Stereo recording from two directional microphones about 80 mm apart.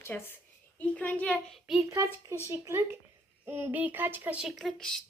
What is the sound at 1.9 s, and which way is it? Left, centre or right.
Speech, right.